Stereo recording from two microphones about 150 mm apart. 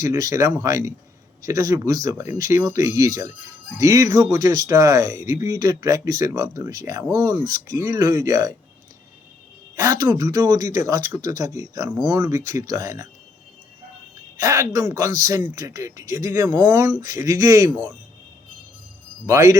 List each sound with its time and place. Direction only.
0.0 s speech: 20° right (ahead or behind)
9.7 s speech: 20° right (ahead or behind)
14.3 s speech: 20° right (ahead or behind)
19.2 s speech: 20° right (ahead or behind)